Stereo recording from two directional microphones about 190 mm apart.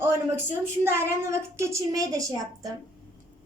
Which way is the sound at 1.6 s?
15° right (ahead or behind).